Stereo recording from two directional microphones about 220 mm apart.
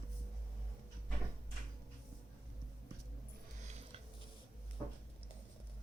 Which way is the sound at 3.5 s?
30° right (ahead or behind).